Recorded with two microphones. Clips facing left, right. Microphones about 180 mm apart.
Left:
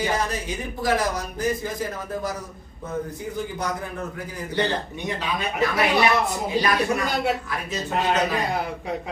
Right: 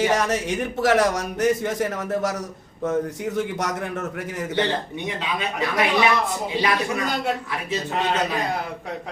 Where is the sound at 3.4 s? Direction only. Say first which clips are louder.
Right 2 dB; 85° right.